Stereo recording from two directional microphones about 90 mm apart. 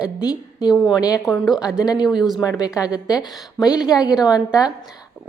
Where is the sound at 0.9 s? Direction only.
45° left (ahead or behind).